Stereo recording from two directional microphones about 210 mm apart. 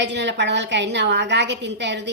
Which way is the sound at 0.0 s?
55° right (ahead or behind).